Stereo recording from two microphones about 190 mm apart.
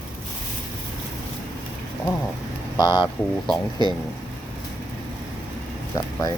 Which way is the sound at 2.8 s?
20° left (ahead or behind).